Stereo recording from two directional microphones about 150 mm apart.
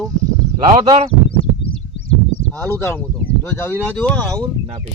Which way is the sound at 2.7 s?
15° left (ahead or behind).